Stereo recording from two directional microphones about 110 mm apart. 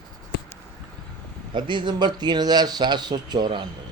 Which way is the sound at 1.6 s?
45° right (ahead or behind).